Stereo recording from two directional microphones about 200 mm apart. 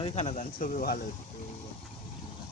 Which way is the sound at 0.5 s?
45° left (ahead or behind).